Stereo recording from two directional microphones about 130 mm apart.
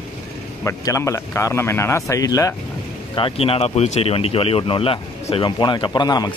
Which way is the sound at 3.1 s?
45° left (ahead or behind).